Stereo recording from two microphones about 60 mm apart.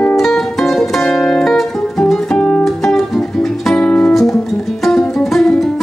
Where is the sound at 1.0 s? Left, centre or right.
Centre.